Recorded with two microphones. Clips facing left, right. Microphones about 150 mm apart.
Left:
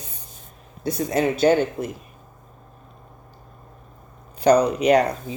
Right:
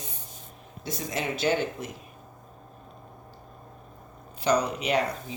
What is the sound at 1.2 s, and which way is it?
Speech, 45° left (ahead or behind).